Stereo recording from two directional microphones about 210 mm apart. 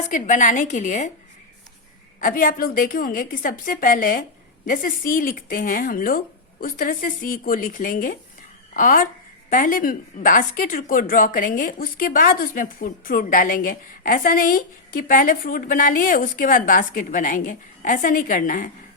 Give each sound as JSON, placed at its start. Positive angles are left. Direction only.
{"t": 0.0, "sound": "a woman's voice", "side_deg": 35}
{"t": 2.2, "sound": "a woman's voice", "side_deg": 40}